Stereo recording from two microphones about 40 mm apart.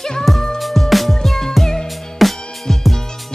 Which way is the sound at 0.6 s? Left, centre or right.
Centre.